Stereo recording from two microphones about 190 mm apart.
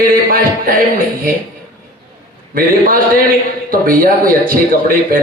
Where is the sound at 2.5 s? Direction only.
50° right (ahead or behind).